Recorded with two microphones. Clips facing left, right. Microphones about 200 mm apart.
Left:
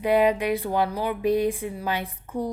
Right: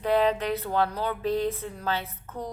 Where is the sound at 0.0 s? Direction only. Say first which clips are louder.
Left 3 dB; 10° left (ahead or behind).